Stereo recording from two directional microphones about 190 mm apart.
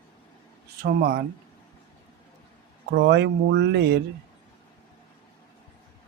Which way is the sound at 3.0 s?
65° right (ahead or behind).